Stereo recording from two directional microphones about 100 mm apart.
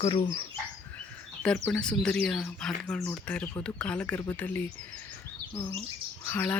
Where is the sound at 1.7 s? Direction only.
10° left (ahead or behind).